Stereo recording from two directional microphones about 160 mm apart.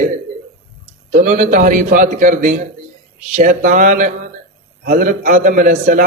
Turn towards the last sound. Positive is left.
turn(degrees=-60)  # may be behind; listen again after turning